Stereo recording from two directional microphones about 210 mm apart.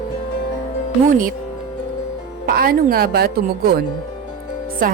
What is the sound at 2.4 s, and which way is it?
Speech, 45° right (ahead or behind).